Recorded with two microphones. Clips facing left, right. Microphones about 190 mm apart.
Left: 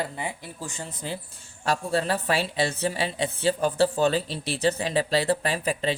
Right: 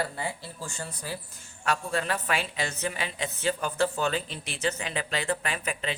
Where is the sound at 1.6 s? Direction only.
30° left (ahead or behind).